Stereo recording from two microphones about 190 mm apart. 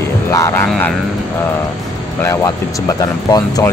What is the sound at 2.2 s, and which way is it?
A man's voice, 15° left (ahead or behind).